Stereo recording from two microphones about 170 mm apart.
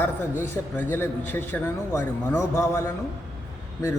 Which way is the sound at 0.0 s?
10° left (ahead or behind).